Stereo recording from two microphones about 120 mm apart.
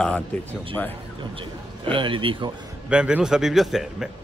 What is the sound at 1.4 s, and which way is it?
A man's voice, 45° right (ahead or behind).